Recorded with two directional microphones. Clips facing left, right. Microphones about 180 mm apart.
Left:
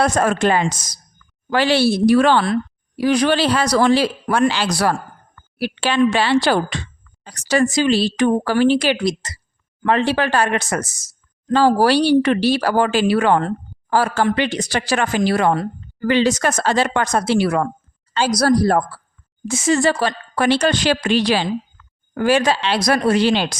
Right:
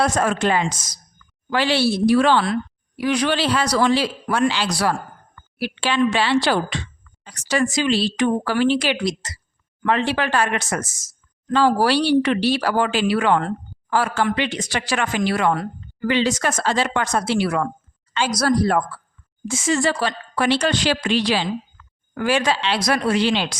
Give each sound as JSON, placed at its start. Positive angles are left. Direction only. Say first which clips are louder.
{"t": 0.0, "sound": "speech", "louder": "left 3 dB", "side_deg": 45}
{"t": 2.5, "sound": "speech", "louder": "left 3 dB", "side_deg": 35}